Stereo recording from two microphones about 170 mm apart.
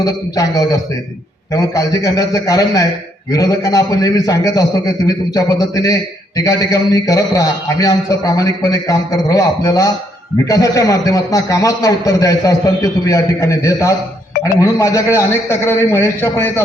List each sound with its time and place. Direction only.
0.0 s a man's voice: 20° left (ahead or behind)